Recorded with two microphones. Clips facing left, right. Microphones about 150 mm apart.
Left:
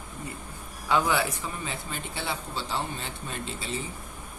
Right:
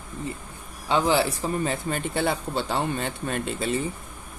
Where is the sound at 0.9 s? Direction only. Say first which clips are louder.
Right 3 dB; 30° right (ahead or behind).